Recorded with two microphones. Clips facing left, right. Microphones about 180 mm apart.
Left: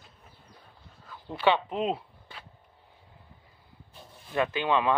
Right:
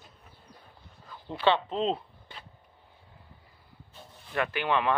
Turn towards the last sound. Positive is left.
turn(degrees=15)  # may be behind; listen again after turning